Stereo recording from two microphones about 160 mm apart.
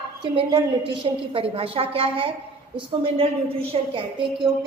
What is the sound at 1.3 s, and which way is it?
Speech, 35° right (ahead or behind).